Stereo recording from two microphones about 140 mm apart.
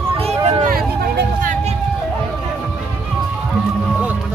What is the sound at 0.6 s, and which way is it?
Vehicle, 90° right.